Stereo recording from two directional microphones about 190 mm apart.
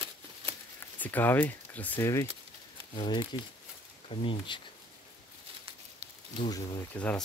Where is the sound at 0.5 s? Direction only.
10° left (ahead or behind).